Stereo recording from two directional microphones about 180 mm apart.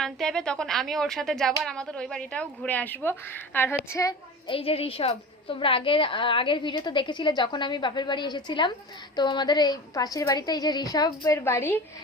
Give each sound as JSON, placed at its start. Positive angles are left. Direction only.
{"t": 0.0, "sound": "speech", "side_deg": 5}
{"t": 4.5, "sound": "a woman's voice", "side_deg": 30}